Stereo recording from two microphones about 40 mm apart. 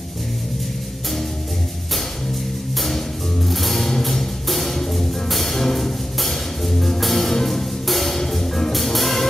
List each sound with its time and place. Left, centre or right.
3.4 s music: centre